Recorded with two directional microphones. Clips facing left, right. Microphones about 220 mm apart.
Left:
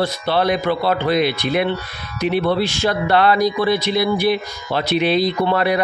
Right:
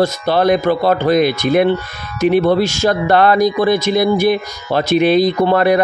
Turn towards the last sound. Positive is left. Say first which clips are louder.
# right 5 dB
turn(degrees=-45)  # may be behind; listen again after turning